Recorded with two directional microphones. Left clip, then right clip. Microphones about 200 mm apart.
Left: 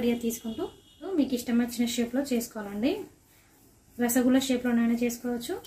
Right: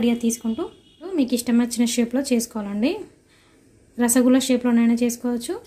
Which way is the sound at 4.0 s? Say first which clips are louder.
Right 7 dB; 35° right (ahead or behind).